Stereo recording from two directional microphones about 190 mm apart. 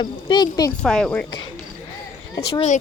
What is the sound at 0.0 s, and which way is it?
Speech, 25° left (ahead or behind).